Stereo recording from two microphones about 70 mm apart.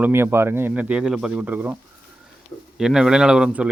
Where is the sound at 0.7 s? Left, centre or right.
Centre.